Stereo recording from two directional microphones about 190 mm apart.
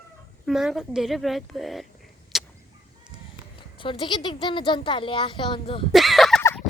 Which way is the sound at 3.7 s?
25° left (ahead or behind).